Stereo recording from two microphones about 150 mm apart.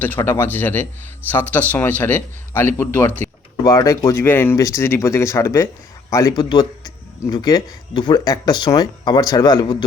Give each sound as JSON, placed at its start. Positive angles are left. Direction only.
{"t": 0.0, "sound": "a man's voice", "side_deg": 15}
{"t": 3.6, "sound": "speech", "side_deg": 25}